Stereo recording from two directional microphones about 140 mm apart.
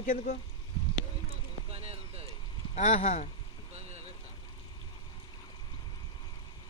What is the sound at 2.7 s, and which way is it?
Speech, 55° left (ahead or behind).